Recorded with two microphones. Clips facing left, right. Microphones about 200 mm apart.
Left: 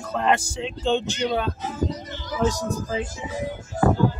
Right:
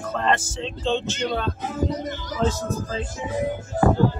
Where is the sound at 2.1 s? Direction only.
45° right (ahead or behind).